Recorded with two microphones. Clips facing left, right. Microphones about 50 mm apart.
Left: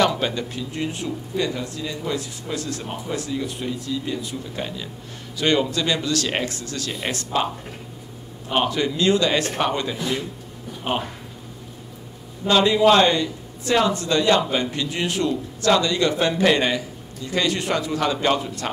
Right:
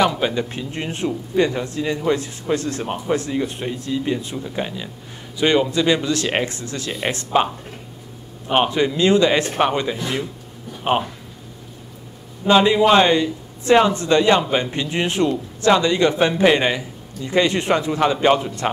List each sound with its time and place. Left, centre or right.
0.0 s speech: centre
0.5 s speech: right
4.4 s a man's voice: centre
8.5 s a man's voice: right
12.4 s a man's voice: right